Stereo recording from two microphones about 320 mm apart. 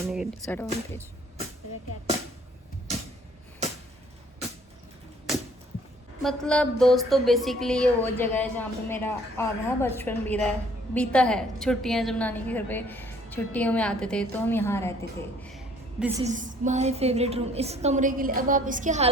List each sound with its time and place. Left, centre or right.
0.0 s music: centre
6.2 s music: centre
15.5 s a sound: centre
16.2 s a woman's voice: right